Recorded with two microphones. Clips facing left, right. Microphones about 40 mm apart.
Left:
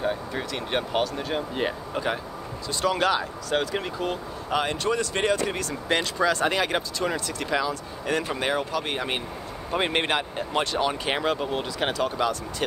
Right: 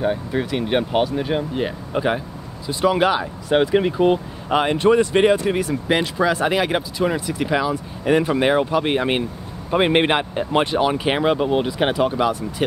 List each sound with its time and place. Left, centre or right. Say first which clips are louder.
0.0 s speech: right 6 dB; centre
1.5 s speech: right 3 dB; centre
1.9 s speech: right 6 dB; centre